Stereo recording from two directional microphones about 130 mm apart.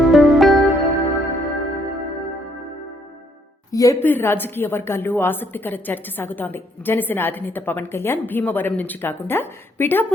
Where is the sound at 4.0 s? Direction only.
15° left (ahead or behind).